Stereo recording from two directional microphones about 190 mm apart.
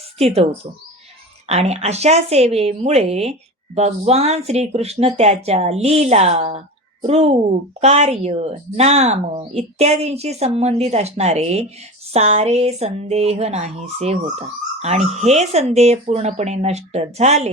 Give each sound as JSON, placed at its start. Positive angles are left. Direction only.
{"t": 0.2, "sound": "speech", "side_deg": -30}
{"t": 1.5, "sound": "speech", "side_deg": -35}